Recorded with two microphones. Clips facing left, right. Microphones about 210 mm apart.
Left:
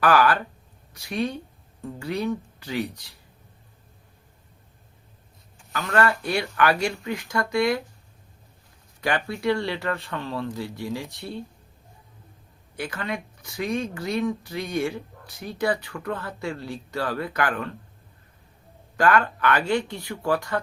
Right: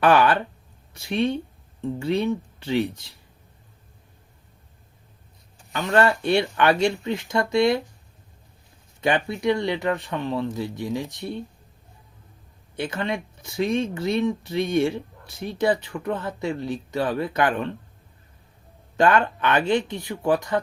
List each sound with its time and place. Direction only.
0.0 s speech: 25° right (ahead or behind)
5.9 s speech: 25° right (ahead or behind)
9.0 s speech: 20° right (ahead or behind)
12.7 s speech: 25° right (ahead or behind)
18.9 s speech: 25° right (ahead or behind)